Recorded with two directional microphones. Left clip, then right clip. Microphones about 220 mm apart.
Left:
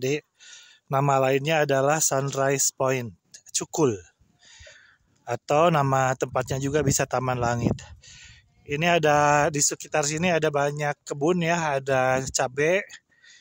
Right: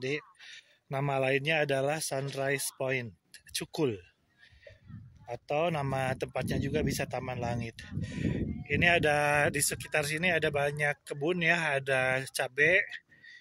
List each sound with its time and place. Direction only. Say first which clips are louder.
0.0 s speech: left 7 dB; 35° left (ahead or behind)
5.2 s a man's voice: left 10 dB; 40° left (ahead or behind)